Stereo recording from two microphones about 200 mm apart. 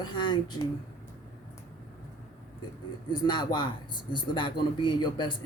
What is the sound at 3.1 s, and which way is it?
A man's voice, 20° left (ahead or behind).